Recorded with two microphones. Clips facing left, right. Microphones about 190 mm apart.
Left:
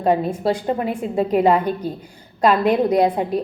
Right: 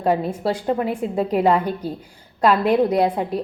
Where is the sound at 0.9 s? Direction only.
15° left (ahead or behind).